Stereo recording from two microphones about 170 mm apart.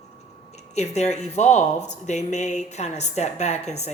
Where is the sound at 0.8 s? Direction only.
40° left (ahead or behind).